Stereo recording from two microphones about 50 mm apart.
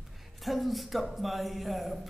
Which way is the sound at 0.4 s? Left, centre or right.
Centre.